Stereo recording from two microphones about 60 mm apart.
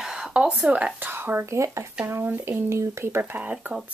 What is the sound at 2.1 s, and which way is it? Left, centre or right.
Speech, right.